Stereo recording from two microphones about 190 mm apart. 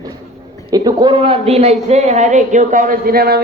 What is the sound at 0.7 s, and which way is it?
A man's voice, 20° right (ahead or behind).